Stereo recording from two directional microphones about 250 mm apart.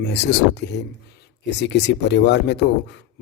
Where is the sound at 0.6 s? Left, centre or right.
Left.